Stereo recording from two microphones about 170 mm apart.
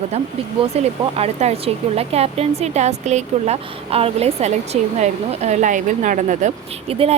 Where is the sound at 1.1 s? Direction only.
40° right (ahead or behind).